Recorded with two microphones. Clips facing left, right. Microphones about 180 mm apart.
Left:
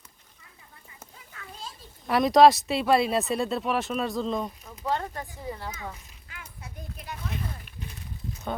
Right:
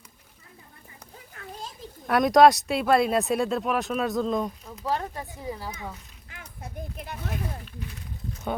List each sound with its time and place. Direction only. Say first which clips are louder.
2.0 s speech: even; centre (ahead or behind)
6.4 s a child's voice: right 6 dB; 55° right (ahead or behind)